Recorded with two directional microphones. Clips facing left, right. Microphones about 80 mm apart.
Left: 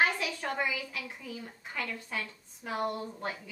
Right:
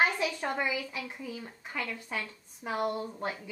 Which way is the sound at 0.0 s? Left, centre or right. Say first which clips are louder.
Right 1 dB; centre.